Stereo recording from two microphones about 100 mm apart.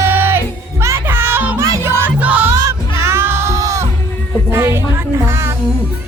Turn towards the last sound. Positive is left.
turn(degrees=-30)  # may be behind; listen again after turning